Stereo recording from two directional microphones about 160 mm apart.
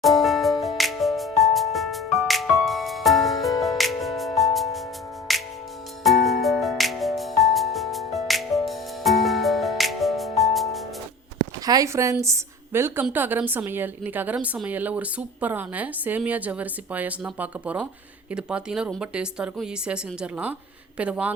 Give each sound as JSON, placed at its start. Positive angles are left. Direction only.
{"t": 0.0, "sound": "music", "side_deg": 0}
{"t": 11.6, "sound": "a sound", "side_deg": -20}
{"t": 12.2, "sound": "a woman's voice", "side_deg": -15}